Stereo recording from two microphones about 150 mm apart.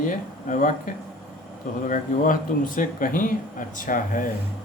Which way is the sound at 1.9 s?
60° left (ahead or behind).